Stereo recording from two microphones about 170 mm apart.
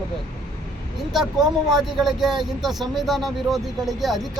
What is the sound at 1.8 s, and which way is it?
Speech, centre (ahead or behind).